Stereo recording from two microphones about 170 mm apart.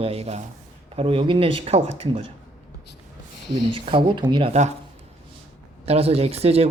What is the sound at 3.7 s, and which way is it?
Speech, 30° right (ahead or behind).